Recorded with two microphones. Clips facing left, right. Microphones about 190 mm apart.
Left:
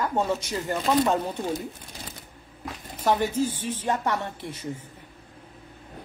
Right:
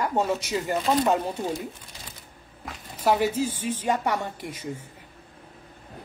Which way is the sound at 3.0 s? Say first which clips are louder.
Right 1 dB; 10° right (ahead or behind).